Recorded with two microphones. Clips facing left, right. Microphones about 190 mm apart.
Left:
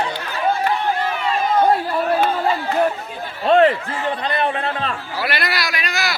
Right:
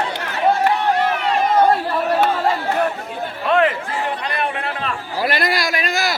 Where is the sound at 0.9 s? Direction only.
80° right.